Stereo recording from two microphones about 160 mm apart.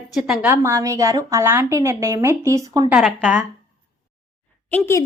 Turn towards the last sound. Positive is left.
turn(degrees=15)  # may be behind; listen again after turning